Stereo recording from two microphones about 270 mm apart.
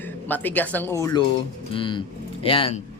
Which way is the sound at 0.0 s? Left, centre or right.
Centre.